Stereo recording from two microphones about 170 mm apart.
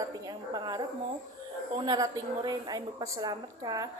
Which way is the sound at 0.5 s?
25° right (ahead or behind).